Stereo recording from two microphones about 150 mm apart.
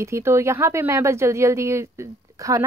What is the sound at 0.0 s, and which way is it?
Speech, 15° right (ahead or behind).